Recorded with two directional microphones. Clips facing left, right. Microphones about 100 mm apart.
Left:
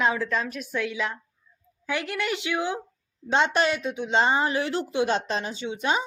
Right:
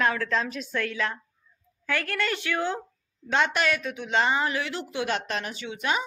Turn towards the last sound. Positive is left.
turn(degrees=25)  # may be behind; listen again after turning